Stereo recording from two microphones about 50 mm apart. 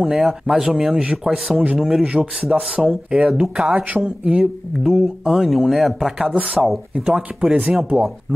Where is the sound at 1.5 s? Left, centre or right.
Right.